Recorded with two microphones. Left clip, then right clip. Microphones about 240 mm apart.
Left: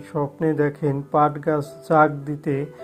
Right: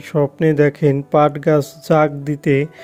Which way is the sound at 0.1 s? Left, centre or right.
Right.